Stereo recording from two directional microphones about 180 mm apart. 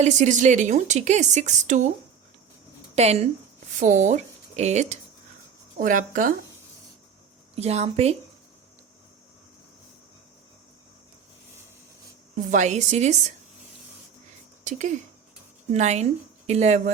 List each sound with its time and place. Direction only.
0.0 s a woman's voice: 40° right (ahead or behind)
2.9 s speech: 35° right (ahead or behind)
7.5 s a woman's voice: 35° right (ahead or behind)
12.5 s a woman's voice: 40° right (ahead or behind)
14.6 s a woman's voice: 40° right (ahead or behind)